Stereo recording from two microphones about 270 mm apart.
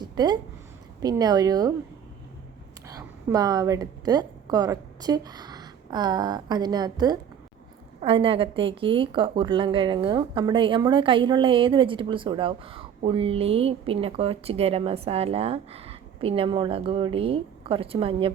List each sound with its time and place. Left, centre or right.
0.0 s a sound: centre
1.0 s speech: centre
2.8 s a woman's voice: centre